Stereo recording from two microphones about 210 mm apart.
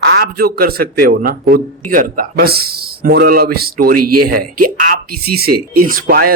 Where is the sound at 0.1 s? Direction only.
45° right (ahead or behind).